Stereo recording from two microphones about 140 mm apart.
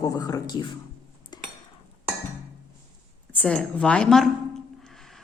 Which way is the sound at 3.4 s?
10° left (ahead or behind).